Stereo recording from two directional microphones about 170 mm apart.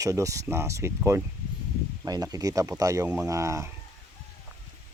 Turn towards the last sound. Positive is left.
turn(degrees=-15)  # may be behind; listen again after turning